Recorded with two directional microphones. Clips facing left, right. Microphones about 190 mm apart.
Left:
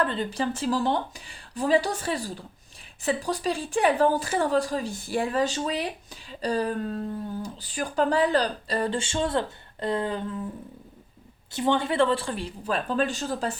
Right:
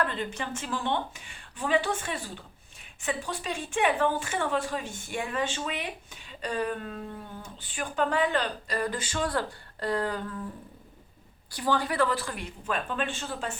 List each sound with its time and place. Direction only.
0.0 s speech: 35° left (ahead or behind)
11.5 s speech: 25° left (ahead or behind)